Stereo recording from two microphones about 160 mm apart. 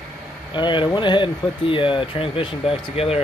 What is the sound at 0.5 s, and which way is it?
Speech, 30° left (ahead or behind).